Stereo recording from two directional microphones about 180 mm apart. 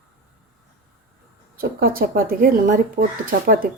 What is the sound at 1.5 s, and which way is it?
Speech, 55° right (ahead or behind).